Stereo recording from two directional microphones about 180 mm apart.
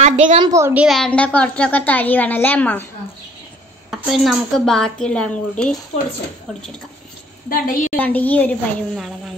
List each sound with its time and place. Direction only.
0.0 s a woman's voice: 40° right (ahead or behind)
0.4 s a woman's voice: 15° right (ahead or behind)
0.8 s a woman's voice: 5° left (ahead or behind)
3.9 s a woman's voice: centre (ahead or behind)
7.4 s a woman's voice: 55° left (ahead or behind)
7.9 s a woman's voice: 10° left (ahead or behind)